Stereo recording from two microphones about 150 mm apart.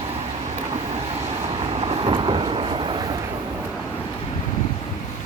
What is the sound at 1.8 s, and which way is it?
Vehicle, 40° right (ahead or behind).